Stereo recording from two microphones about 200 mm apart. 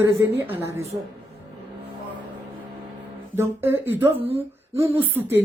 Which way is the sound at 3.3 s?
10° right (ahead or behind).